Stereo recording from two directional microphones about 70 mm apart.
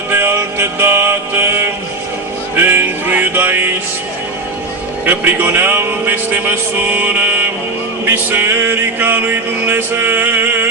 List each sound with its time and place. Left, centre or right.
0.1 s music: right
2.5 s music: right
5.0 s music: right